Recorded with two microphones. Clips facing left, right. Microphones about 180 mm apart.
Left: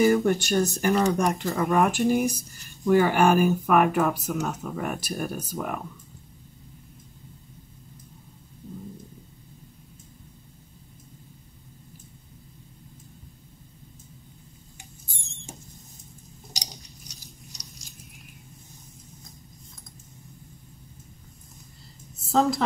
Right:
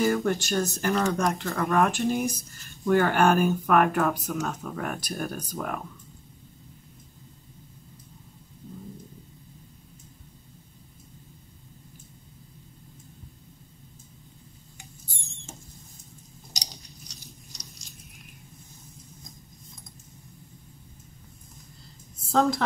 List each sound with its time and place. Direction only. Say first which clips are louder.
0.0 s speech: left 4 dB; 15° left (ahead or behind)
2.8 s speech: left 2 dB; 5° left (ahead or behind)
22.3 s a woman's voice: left 1 dB; 5° left (ahead or behind)